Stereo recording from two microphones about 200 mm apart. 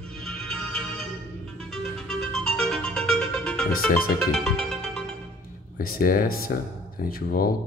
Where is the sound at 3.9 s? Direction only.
45° left (ahead or behind).